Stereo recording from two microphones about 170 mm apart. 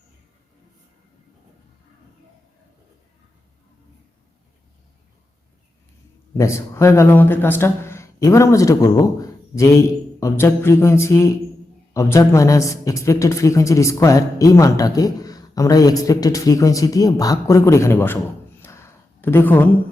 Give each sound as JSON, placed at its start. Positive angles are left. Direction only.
{"t": 6.3, "sound": "a woman's voice", "side_deg": 15}